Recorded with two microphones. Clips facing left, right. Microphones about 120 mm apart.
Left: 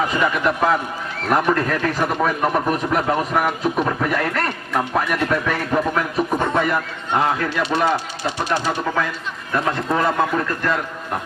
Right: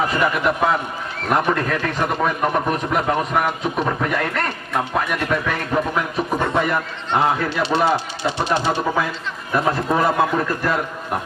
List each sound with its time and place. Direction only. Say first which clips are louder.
0.2 s a man's voice: even; 5° right (ahead or behind)
7.3 s speech: right 1 dB; 25° right (ahead or behind)
9.6 s a man's voice: right 2 dB; 10° right (ahead or behind)